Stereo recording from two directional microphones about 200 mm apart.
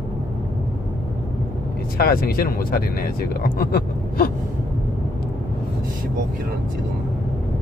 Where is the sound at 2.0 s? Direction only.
50° left (ahead or behind).